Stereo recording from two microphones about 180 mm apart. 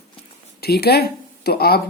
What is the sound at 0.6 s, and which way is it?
Speech, 60° left (ahead or behind).